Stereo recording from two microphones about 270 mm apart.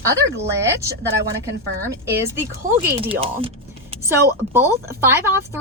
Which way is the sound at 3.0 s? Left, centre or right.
Right.